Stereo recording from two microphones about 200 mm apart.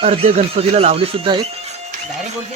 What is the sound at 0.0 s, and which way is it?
Speech, 30° right (ahead or behind).